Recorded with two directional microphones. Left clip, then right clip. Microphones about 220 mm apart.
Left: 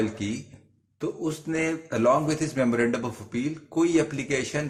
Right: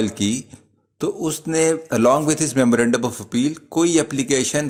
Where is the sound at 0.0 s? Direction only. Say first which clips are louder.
Right 7 dB; 50° right (ahead or behind).